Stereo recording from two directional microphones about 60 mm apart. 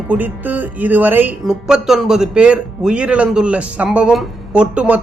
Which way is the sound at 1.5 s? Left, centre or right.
Centre.